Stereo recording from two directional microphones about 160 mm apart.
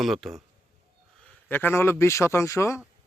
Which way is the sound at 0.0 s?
Centre (ahead or behind).